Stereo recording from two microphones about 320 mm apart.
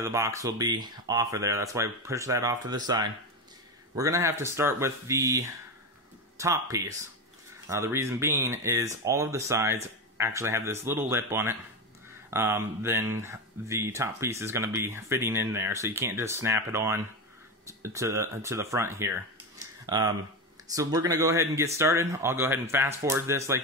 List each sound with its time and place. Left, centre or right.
0.0 s speech: centre